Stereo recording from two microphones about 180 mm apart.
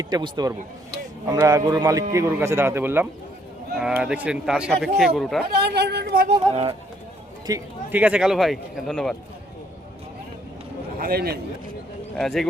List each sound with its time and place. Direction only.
0.0 s speech: 20° right (ahead or behind); by 5.4 s centre (ahead or behind)
5.5 s speech: 65° right (ahead or behind)
6.2 s speech: 30° right (ahead or behind)
7.4 s speech: 20° right (ahead or behind)
7.9 s speech: 5° right (ahead or behind)
11.0 s speech: 60° right (ahead or behind)
12.1 s speech: centre (ahead or behind)